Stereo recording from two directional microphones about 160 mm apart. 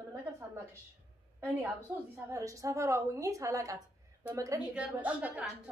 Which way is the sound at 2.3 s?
20° right (ahead or behind).